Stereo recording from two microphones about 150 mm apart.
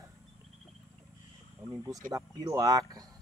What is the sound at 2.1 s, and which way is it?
Speech, 25° right (ahead or behind).